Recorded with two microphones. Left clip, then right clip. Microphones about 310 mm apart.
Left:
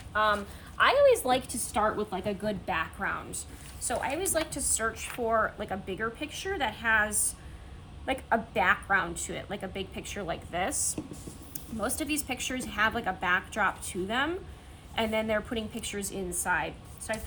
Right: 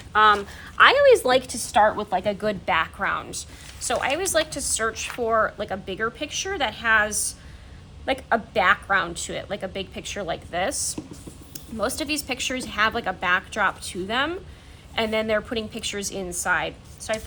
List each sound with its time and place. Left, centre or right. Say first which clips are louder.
0.1 s a woman's voice: right 9 dB; right